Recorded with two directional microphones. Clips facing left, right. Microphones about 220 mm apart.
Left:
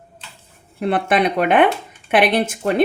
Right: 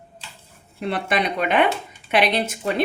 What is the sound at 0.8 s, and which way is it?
A woman's voice, 55° left (ahead or behind).